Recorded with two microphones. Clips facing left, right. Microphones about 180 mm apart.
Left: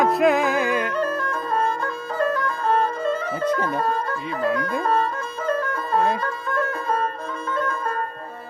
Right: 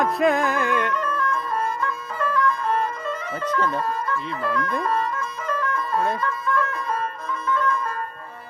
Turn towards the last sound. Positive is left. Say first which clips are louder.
# right 2 dB
turn(degrees=30)  # may be behind; listen again after turning